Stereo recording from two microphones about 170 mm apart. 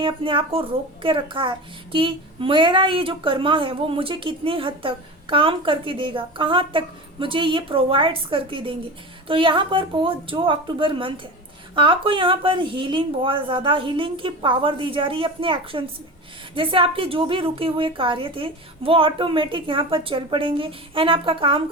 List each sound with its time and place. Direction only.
0.0 s a woman's voice: 30° right (ahead or behind)